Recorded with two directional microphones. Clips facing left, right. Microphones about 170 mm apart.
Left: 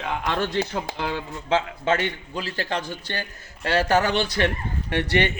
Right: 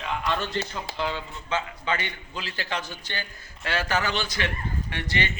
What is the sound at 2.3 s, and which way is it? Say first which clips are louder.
A man's voice: left 5 dB; 40° left (ahead or behind).